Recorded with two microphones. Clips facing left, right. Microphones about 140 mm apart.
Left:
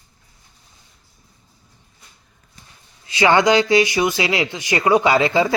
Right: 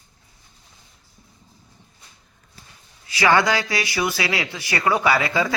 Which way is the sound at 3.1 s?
20° left (ahead or behind).